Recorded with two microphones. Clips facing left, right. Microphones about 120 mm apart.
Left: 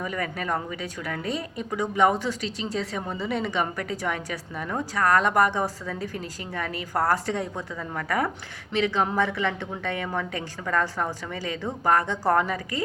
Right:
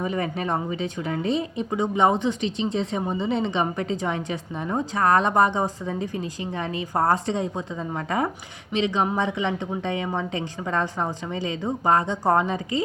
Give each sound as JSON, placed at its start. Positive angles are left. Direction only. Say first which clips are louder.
{"t": 0.0, "sound": "speech", "louder": "right 4 dB", "side_deg": -25}